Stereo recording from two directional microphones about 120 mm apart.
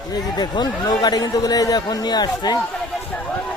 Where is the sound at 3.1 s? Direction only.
10° left (ahead or behind).